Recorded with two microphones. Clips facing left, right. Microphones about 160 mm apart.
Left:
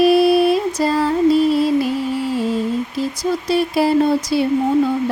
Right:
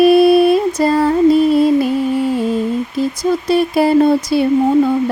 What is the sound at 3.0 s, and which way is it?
Speech, 50° right (ahead or behind).